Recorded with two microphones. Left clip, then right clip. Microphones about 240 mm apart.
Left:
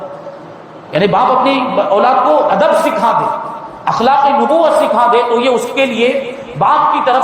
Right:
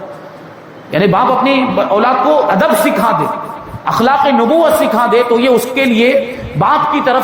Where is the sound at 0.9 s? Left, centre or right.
Right.